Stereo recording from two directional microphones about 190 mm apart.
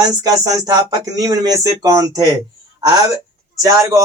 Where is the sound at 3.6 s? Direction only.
15° right (ahead or behind).